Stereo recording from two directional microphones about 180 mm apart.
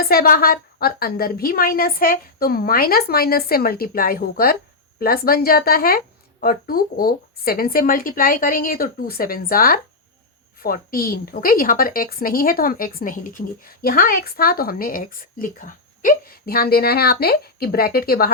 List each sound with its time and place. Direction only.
0.0 s a woman's voice: 55° left (ahead or behind)